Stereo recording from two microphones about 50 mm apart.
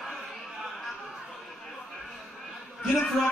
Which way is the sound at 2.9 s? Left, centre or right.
Centre.